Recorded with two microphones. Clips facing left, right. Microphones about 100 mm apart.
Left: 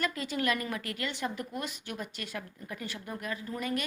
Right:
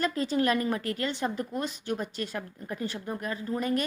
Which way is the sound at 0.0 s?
35° right (ahead or behind).